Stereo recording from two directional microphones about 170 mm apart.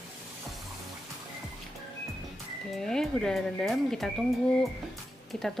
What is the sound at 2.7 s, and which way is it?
Speech, centre (ahead or behind).